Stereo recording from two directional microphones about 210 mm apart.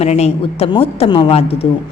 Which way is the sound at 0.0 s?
30° left (ahead or behind).